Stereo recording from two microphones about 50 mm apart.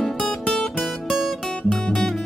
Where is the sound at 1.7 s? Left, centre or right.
Centre.